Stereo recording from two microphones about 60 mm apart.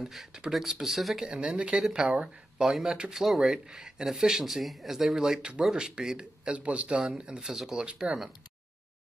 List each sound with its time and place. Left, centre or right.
0.0 s speech: centre